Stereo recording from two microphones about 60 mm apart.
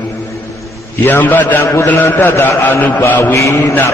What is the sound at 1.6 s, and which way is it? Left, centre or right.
Mantra, left.